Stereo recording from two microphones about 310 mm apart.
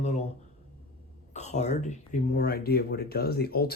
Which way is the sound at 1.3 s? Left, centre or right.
Left.